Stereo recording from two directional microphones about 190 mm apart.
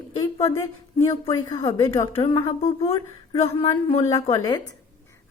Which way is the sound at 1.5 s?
15° left (ahead or behind).